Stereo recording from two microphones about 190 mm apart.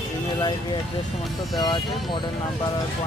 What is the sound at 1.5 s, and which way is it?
Speech, 20° left (ahead or behind).